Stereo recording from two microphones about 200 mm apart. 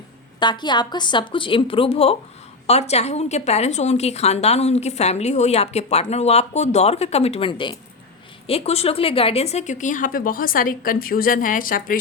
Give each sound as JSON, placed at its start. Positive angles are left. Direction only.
{"t": 0.3, "sound": "a woman's voice", "side_deg": 20}